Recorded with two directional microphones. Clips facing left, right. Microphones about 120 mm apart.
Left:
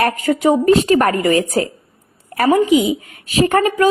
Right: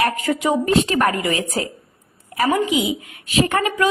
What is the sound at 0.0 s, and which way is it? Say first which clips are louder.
A woman's voice: left 4 dB; 40° left (ahead or behind).